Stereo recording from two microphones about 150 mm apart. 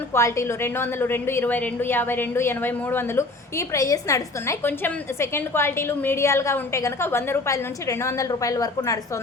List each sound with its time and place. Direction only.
0.1 s a woman's voice: 20° left (ahead or behind)